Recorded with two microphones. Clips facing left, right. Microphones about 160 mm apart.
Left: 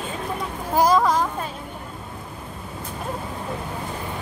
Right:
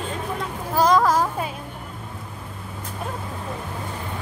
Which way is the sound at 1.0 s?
5° right (ahead or behind).